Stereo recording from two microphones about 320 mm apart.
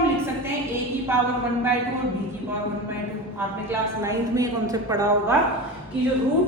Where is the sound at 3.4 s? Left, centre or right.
Centre.